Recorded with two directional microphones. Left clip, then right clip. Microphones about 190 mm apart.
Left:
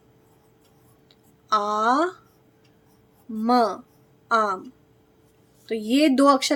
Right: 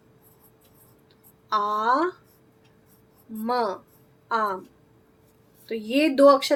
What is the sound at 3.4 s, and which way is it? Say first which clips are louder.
A woman's voice: left 5 dB; 35° left (ahead or behind).